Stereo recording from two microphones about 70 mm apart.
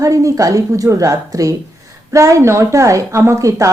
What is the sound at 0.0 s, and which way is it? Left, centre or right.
Speech, right.